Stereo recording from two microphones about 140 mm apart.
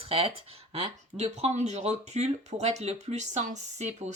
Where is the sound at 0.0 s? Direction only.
40° right (ahead or behind).